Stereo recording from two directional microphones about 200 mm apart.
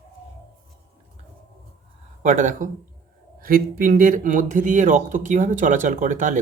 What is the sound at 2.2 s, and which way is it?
Speech, 40° right (ahead or behind).